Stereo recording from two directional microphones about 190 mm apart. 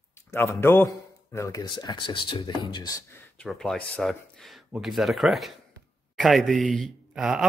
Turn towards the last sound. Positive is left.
turn(degrees=0)  # may be behind; listen again after turning